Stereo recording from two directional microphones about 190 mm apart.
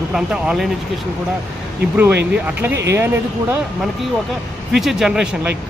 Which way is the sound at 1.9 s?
10° right (ahead or behind).